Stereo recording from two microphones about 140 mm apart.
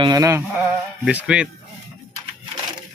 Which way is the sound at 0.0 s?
25° right (ahead or behind).